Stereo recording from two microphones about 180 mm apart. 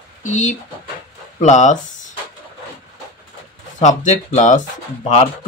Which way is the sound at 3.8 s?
40° left (ahead or behind).